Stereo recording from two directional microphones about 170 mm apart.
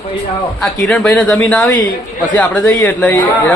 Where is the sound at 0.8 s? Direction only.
5° left (ahead or behind).